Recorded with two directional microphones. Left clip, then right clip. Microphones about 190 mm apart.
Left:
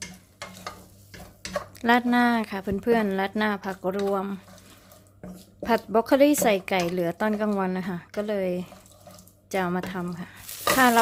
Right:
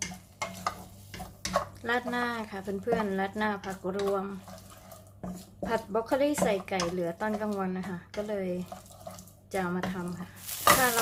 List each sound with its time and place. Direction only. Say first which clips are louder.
1.8 s speech: left 9 dB; 50° left (ahead or behind)
5.6 s speech: left 7 dB; 50° left (ahead or behind)